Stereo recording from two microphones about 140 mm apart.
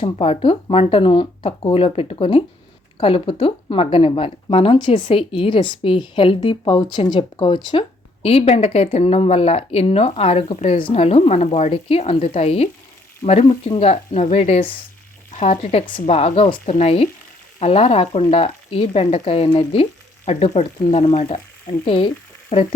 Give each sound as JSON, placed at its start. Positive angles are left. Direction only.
{"t": 0.0, "sound": "speech", "side_deg": 40}
{"t": 15.4, "sound": "speech", "side_deg": 55}
{"t": 21.8, "sound": "frying", "side_deg": 40}